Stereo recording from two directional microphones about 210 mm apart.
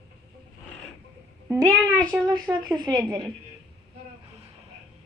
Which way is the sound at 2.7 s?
20° right (ahead or behind).